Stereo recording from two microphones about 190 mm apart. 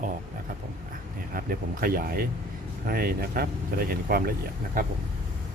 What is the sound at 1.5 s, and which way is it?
Speech, 50° right (ahead or behind).